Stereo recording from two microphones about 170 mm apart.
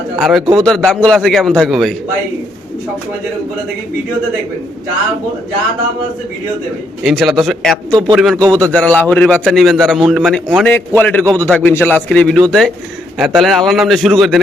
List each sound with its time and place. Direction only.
0.2 s a man's voice: centre (ahead or behind)
0.4 s speech: 25° right (ahead or behind)
0.7 s a man's voice: 5° left (ahead or behind)
7.0 s a man's voice: centre (ahead or behind)
8.4 s speech: 20° right (ahead or behind)
9.0 s a man's voice: 5° left (ahead or behind)
10.7 s a man's voice: 10° left (ahead or behind)